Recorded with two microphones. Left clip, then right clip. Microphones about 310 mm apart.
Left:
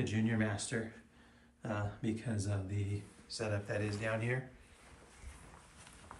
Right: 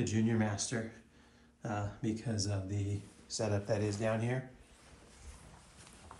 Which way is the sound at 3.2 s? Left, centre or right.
Centre.